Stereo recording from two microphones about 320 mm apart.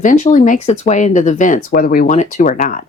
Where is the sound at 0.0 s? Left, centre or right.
Left.